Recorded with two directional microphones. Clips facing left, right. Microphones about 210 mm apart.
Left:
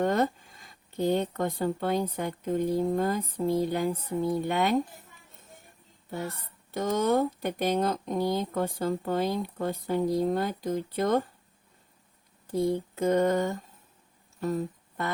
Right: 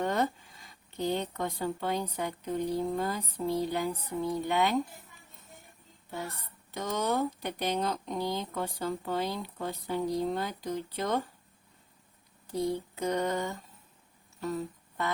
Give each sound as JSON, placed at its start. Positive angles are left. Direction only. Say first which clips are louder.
{"t": 0.0, "sound": "speech", "louder": "left 4 dB", "side_deg": 50}
{"t": 6.7, "sound": "speech", "louder": "left 5 dB", "side_deg": 50}
{"t": 12.7, "sound": "speech", "louder": "left 6 dB", "side_deg": 50}
{"t": 14.4, "sound": "a sound", "louder": "left 4 dB", "side_deg": 45}